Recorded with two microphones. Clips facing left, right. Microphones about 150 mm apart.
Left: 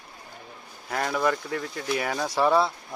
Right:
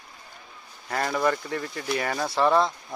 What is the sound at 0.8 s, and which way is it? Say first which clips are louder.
Speech: right 1 dB; centre (ahead or behind).